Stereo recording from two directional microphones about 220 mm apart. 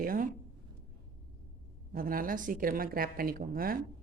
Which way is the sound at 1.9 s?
40° right (ahead or behind).